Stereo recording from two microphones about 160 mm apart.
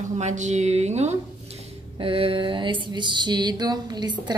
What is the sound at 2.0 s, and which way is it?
Mantra, 35° right (ahead or behind).